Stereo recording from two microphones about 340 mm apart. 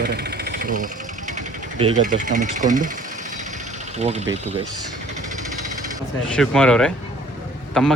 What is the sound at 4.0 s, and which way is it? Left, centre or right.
Speech, centre.